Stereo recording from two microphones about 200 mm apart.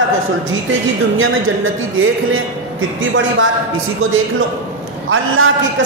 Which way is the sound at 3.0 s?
75° right (ahead or behind).